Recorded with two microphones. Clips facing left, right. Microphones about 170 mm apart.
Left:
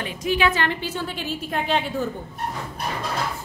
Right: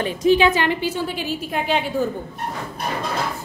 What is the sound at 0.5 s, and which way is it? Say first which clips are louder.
A woman's voice: right 4 dB; 15° right (ahead or behind).